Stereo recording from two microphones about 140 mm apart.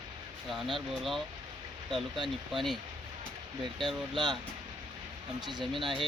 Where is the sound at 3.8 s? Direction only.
5° right (ahead or behind).